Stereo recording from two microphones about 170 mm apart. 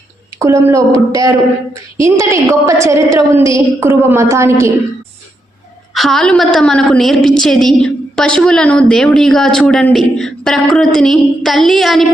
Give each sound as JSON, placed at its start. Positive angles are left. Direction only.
{"t": 0.3, "sound": "a woman's voice", "side_deg": -15}
{"t": 5.9, "sound": "a woman's voice", "side_deg": 0}